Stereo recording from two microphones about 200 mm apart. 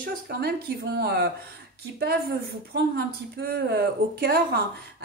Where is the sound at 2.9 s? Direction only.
50° right (ahead or behind).